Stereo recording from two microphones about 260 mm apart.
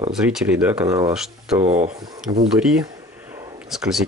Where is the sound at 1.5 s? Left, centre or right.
Right.